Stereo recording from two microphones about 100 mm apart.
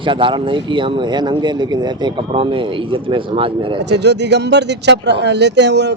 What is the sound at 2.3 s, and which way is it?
Speech, 60° right (ahead or behind).